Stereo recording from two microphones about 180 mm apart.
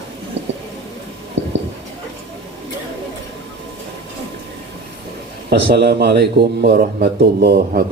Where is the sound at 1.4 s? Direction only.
80° right.